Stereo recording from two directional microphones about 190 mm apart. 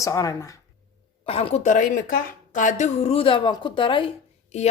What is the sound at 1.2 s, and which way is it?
A woman's voice, 30° left (ahead or behind).